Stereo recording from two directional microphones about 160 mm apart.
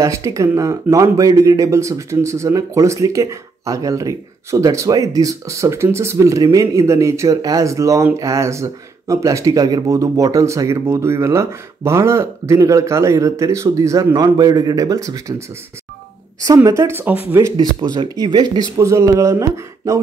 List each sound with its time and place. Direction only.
0.0 s speech: 20° right (ahead or behind)
16.4 s speech: 20° right (ahead or behind)
17.7 s speech: 25° right (ahead or behind)